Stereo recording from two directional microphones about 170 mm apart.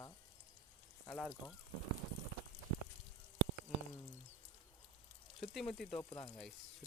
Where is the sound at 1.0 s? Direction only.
5° left (ahead or behind).